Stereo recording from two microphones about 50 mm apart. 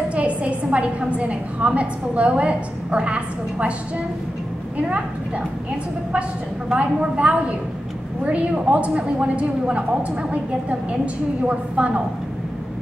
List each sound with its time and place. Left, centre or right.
0.1 s a woman's voice: right
4.7 s a woman's voice: right
6.7 s a woman's voice: right
11.4 s a woman's voice: right